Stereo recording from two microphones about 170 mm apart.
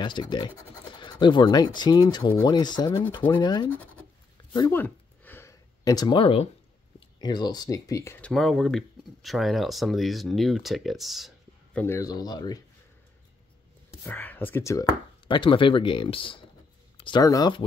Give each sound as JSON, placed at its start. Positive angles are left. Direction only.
{"t": 0.0, "sound": "speech", "side_deg": 25}
{"t": 4.6, "sound": "a sound", "side_deg": 10}
{"t": 7.2, "sound": "speech", "side_deg": 25}
{"t": 8.3, "sound": "speech", "side_deg": 0}
{"t": 11.8, "sound": "speech", "side_deg": 20}
{"t": 14.0, "sound": "speech", "side_deg": 10}
{"t": 15.2, "sound": "speech", "side_deg": 30}